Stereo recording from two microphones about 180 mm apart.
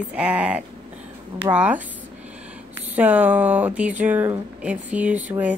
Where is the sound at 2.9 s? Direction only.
10° right (ahead or behind).